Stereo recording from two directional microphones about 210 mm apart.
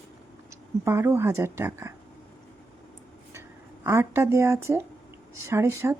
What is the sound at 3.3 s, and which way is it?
Speech, 10° right (ahead or behind).